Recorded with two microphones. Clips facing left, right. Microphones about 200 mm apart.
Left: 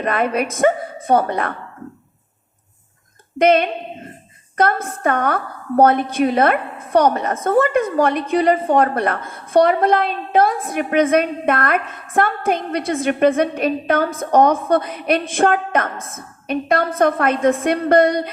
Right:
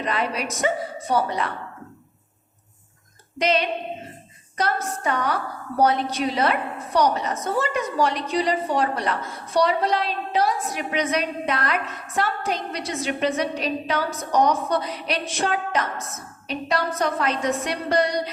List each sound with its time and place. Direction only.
0.0 s a woman's voice: 55° left (ahead or behind)
3.3 s a woman's voice: 55° left (ahead or behind)